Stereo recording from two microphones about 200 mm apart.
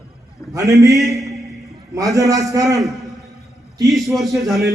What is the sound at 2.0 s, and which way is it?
Speech, 15° right (ahead or behind).